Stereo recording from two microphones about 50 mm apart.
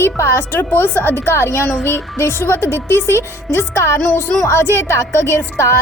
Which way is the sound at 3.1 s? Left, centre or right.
Left.